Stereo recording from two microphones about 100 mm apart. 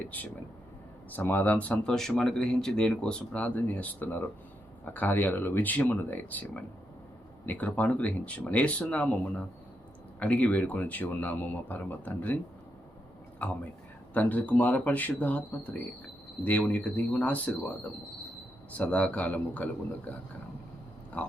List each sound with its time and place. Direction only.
1.1 s speech: 20° left (ahead or behind)
13.4 s speech: 15° left (ahead or behind)
18.7 s speech: 15° left (ahead or behind)